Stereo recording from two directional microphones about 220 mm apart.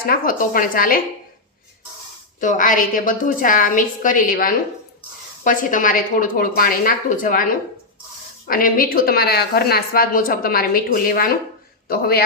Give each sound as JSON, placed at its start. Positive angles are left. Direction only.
{"t": 0.0, "sound": "speech", "side_deg": 40}
{"t": 2.4, "sound": "speech", "side_deg": 35}